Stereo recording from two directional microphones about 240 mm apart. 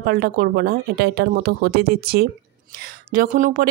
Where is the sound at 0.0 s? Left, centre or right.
Right.